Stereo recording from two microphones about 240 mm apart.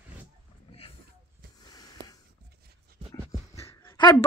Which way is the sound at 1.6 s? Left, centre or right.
Centre.